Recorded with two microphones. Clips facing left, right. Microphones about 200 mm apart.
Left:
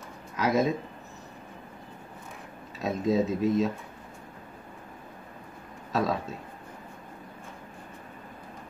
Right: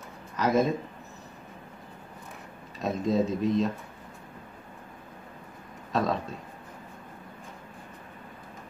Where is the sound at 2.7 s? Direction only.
Centre (ahead or behind).